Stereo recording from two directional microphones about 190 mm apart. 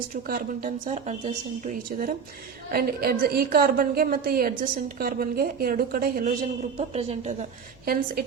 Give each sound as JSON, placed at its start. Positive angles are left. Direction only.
{"t": 0.1, "sound": "a woman's voice", "side_deg": -45}
{"t": 6.7, "sound": "a woman's voice", "side_deg": -35}